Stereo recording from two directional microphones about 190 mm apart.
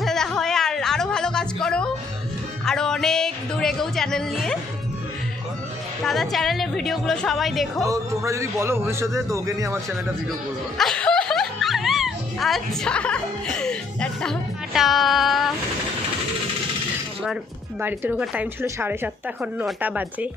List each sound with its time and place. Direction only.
0.0 s a sound: centre (ahead or behind)
2.6 s music: 5° left (ahead or behind)
6.0 s a woman's voice: centre (ahead or behind)
7.9 s a man's voice: 15° right (ahead or behind)
10.8 s music: 5° left (ahead or behind)
17.8 s a man's voice: 5° right (ahead or behind)